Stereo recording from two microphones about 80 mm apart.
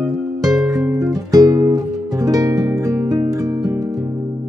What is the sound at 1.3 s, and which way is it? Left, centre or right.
Music, right.